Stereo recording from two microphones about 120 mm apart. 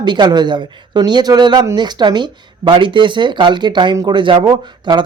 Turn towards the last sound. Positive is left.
turn(degrees=-40)  # may be behind; listen again after turning